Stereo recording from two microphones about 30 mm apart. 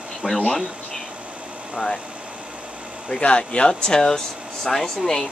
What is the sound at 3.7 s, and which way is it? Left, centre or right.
Speech, left.